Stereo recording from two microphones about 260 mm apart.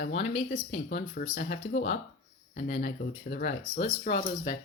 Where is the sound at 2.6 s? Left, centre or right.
Left.